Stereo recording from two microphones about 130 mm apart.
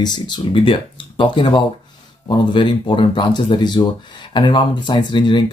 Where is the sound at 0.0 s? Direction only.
35° left (ahead or behind).